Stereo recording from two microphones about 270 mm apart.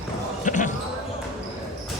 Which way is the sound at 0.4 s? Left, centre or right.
Left.